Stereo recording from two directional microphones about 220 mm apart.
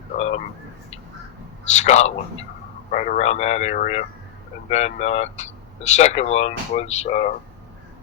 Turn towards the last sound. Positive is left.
turn(degrees=30)  # may be behind; listen again after turning